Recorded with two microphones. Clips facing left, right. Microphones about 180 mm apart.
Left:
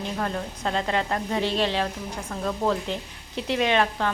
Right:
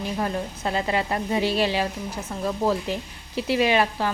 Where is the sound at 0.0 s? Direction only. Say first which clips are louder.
Right 2 dB; 10° right (ahead or behind).